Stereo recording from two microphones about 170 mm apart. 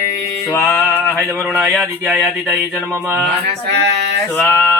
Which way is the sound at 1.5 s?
5° right (ahead or behind).